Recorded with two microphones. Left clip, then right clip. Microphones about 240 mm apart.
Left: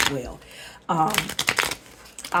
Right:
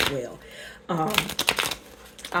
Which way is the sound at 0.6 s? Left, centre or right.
Left.